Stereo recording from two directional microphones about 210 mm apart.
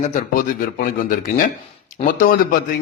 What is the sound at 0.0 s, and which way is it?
Speech, 35° left (ahead or behind).